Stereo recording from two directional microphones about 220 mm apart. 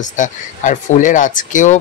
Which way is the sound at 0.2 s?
35° left (ahead or behind).